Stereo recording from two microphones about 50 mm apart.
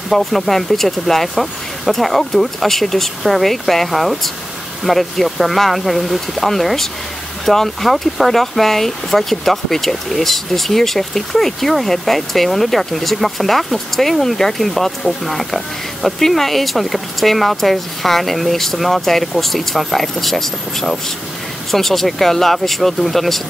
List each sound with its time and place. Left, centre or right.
0.1 s speech: centre